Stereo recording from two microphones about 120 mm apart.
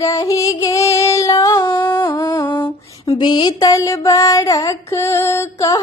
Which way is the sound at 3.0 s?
35° left (ahead or behind).